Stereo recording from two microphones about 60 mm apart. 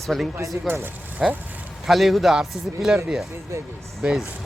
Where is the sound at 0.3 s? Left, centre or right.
Right.